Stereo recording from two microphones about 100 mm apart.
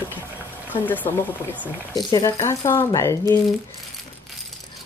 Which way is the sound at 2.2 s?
30° left (ahead or behind).